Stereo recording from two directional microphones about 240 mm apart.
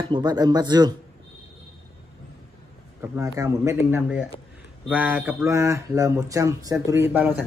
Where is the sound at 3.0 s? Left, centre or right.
Centre.